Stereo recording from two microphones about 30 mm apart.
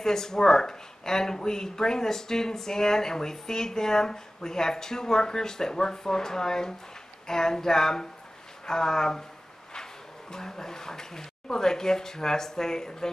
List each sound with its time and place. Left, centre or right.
0.0 s speech: centre
10.3 s speech: centre